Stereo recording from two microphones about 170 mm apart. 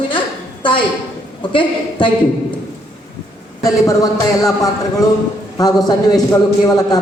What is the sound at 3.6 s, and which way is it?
A woman's voice, 20° left (ahead or behind).